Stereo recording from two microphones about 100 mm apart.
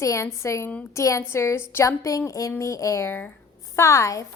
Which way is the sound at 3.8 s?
30° left (ahead or behind).